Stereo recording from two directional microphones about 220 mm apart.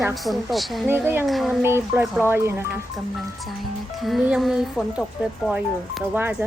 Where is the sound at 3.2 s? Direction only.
Centre (ahead or behind).